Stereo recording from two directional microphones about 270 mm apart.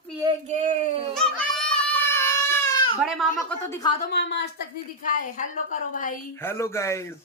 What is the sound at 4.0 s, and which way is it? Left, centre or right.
Speech, left.